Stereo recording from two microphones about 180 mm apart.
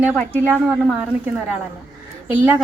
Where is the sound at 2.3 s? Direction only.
10° right (ahead or behind).